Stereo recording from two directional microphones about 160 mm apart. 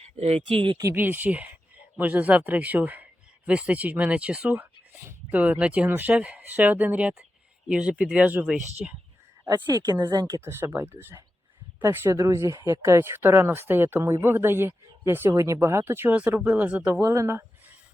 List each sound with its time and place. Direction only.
0.2 s speech: 40° right (ahead or behind)
0.8 s speech: 15° right (ahead or behind)
9.7 s speech: 25° right (ahead or behind)